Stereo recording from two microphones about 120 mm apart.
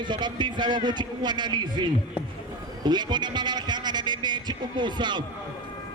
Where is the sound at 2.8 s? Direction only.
35° right (ahead or behind).